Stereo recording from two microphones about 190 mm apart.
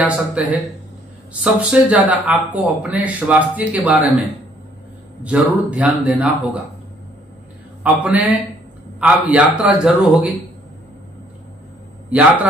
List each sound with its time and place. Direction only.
0.0 s speech: 5° right (ahead or behind)
5.2 s speech: 5° right (ahead or behind)
7.8 s speech: 5° right (ahead or behind)
12.1 s speech: 5° right (ahead or behind)